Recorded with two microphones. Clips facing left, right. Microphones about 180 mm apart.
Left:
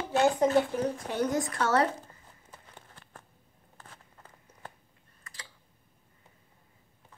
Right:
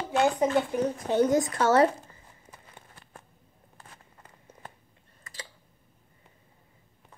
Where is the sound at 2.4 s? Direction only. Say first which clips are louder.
Even; 10° right (ahead or behind).